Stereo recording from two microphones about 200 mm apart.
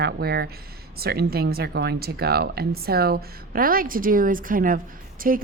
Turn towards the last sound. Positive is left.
turn(degrees=-45)  # may be behind; listen again after turning